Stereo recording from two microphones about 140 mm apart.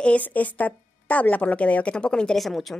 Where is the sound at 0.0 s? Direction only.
10° left (ahead or behind).